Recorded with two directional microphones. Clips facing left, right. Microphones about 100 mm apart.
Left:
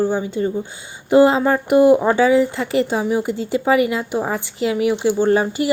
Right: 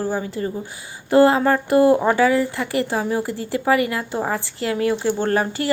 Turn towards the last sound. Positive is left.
turn(degrees=20)  # may be behind; listen again after turning